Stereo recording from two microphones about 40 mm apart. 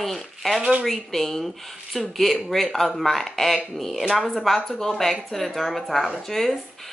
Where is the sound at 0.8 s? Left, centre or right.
Centre.